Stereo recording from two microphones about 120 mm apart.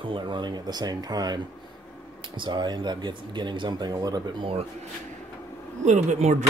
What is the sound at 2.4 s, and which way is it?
Speech, 40° right (ahead or behind).